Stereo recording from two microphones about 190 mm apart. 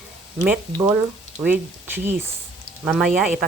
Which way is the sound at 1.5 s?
10° right (ahead or behind).